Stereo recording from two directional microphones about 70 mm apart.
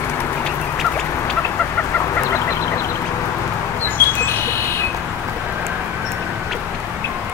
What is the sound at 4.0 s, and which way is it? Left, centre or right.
Bird, left.